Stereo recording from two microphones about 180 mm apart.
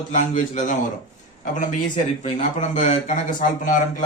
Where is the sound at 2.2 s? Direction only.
40° left (ahead or behind).